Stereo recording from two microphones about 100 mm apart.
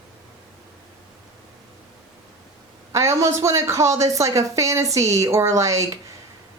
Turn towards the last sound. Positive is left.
turn(degrees=-30)  # may be behind; listen again after turning